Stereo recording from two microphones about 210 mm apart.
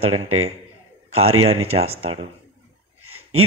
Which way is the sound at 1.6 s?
30° right (ahead or behind).